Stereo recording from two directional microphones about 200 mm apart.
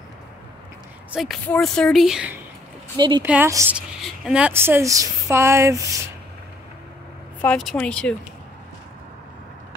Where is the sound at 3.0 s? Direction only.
20° right (ahead or behind).